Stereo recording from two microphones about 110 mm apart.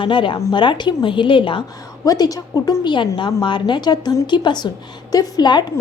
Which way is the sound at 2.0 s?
35° left (ahead or behind).